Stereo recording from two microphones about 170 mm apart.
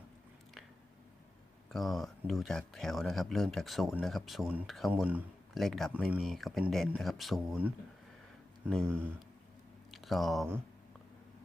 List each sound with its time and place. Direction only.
1.7 s speech: centre (ahead or behind)
9.9 s speech: centre (ahead or behind)